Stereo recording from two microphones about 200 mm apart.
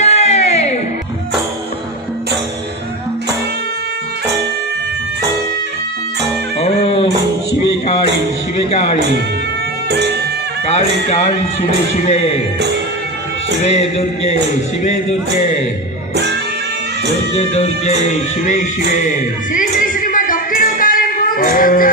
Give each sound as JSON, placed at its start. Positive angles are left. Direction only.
{"t": 0.0, "sound": "music", "side_deg": 30}
{"t": 6.6, "sound": "music", "side_deg": 30}
{"t": 9.9, "sound": "music", "side_deg": -55}
{"t": 10.7, "sound": "speech", "side_deg": 35}
{"t": 13.6, "sound": "speech", "side_deg": 35}
{"t": 17.3, "sound": "speech", "side_deg": 35}
{"t": 19.0, "sound": "music", "side_deg": 40}